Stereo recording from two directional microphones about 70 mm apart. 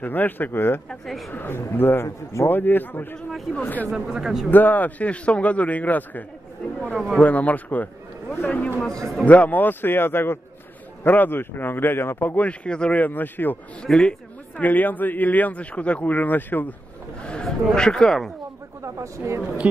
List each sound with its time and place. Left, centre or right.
0.0 s speech: left
0.8 s speech: centre
1.3 s speech: left
3.2 s speech: centre
3.5 s speech: left
3.9 s a man's voice: centre
4.5 s speech: left
7.2 s speech: left
13.0 s speech: left
13.8 s speech: centre
14.6 s speech: left
17.2 s speech: centre
18.8 s speech: right
19.6 s speech: centre